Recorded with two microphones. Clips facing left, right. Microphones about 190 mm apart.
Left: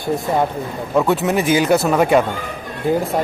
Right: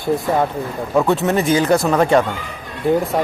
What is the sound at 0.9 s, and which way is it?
Speech, centre (ahead or behind).